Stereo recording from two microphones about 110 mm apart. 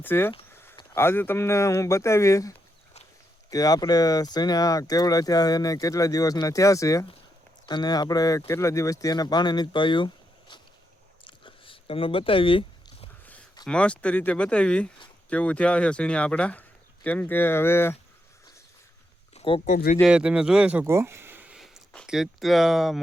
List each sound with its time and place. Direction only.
0.0 s speech: 20° left (ahead or behind)
0.5 s a sound: 20° left (ahead or behind)
0.9 s speech: 20° left (ahead or behind); by 10.1 s 45° left (ahead or behind)
11.3 s a sound: 50° left (ahead or behind)
13.7 s speech: 10° left (ahead or behind)
19.3 s a sound: 70° left (ahead or behind)
20.1 s speech: 10° right (ahead or behind)
20.8 s speech: 25° right (ahead or behind)
22.0 s speech: 5° right (ahead or behind)